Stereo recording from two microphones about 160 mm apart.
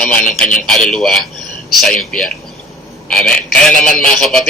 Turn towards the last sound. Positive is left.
turn(degrees=0)  # may be behind; listen again after turning